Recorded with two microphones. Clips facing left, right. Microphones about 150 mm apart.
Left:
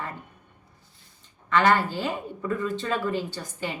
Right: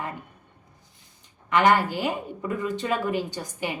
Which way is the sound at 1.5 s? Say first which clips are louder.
Right 1 dB; 15° right (ahead or behind).